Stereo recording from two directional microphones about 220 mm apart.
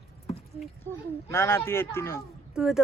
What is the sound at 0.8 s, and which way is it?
Speech, 10° left (ahead or behind).